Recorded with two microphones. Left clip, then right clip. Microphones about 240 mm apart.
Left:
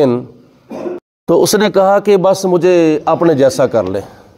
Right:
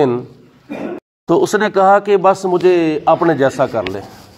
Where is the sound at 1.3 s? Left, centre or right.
Left.